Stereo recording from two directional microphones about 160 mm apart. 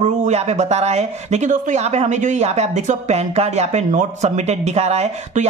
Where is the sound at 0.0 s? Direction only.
45° right (ahead or behind).